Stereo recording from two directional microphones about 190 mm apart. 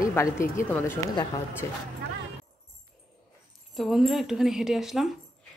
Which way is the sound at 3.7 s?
Centre (ahead or behind).